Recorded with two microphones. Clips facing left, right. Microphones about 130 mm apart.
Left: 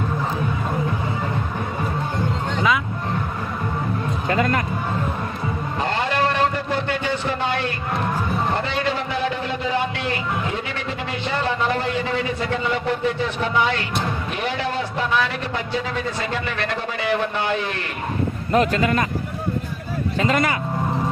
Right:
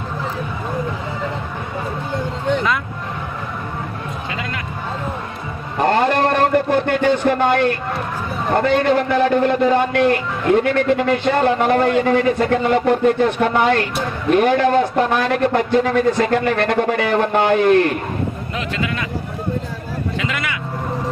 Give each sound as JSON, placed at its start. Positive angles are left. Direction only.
{"t": 4.3, "sound": "a man's voice", "side_deg": 45}
{"t": 5.8, "sound": "a sound", "side_deg": -50}
{"t": 8.5, "sound": "a man's voice", "side_deg": -50}
{"t": 18.5, "sound": "a man's voice", "side_deg": 45}
{"t": 20.1, "sound": "speech", "side_deg": 40}